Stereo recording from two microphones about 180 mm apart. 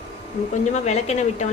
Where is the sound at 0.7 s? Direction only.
35° left (ahead or behind).